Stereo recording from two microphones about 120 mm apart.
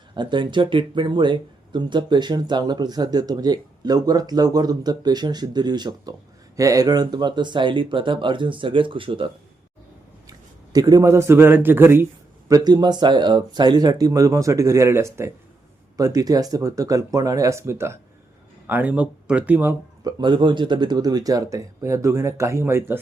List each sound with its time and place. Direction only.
0.1 s speech: 40° right (ahead or behind)
10.2 s a man's voice: 30° right (ahead or behind)
12.5 s speech: 30° right (ahead or behind); by 19.7 s 15° right (ahead or behind)
20.1 s speech: 35° right (ahead or behind); by 23.0 s 20° right (ahead or behind)